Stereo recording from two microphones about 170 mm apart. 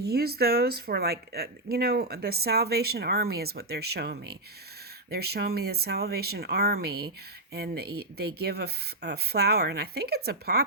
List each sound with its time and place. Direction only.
0.0 s speech: 65° right (ahead or behind)